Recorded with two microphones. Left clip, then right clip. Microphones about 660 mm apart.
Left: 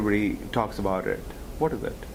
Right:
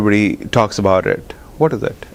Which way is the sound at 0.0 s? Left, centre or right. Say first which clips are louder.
Right 10 dB; right.